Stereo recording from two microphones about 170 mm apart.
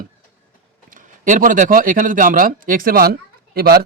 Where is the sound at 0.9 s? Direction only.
50° right (ahead or behind).